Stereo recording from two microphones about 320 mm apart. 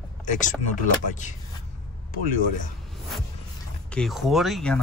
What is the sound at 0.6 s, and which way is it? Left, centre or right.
Speech, left.